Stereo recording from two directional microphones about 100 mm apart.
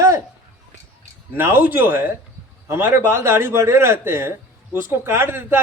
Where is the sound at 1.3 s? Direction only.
20° right (ahead or behind).